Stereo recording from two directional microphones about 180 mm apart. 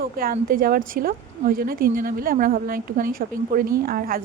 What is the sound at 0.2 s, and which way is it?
A woman's voice, 50° right (ahead or behind).